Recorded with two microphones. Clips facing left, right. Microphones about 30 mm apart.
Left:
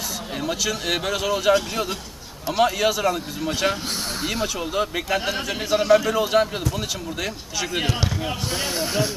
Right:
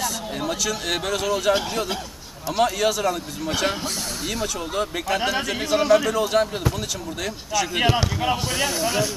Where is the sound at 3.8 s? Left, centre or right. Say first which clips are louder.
Left 1 dB; centre.